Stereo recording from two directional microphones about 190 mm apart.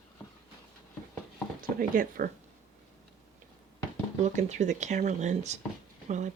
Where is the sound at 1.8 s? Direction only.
50° right (ahead or behind).